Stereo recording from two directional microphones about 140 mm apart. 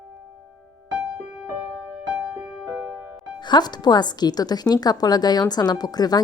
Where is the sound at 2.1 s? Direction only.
15° right (ahead or behind).